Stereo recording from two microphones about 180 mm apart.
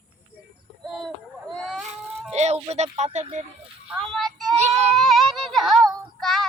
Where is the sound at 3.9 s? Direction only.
Centre (ahead or behind).